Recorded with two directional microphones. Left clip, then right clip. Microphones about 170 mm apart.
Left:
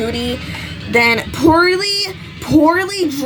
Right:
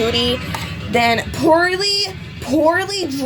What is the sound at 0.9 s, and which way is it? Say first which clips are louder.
Music: left 3 dB; 15° left (ahead or behind).